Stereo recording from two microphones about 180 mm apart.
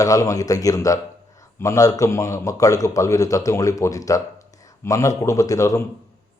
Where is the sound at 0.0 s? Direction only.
20° left (ahead or behind).